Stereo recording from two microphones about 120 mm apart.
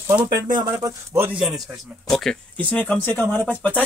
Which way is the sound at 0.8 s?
25° right (ahead or behind).